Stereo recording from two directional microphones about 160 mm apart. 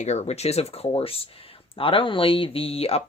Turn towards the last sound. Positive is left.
turn(degrees=40)  # may be behind; listen again after turning